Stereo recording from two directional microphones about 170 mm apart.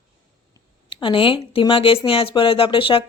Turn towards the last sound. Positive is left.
turn(degrees=30)  # may be behind; listen again after turning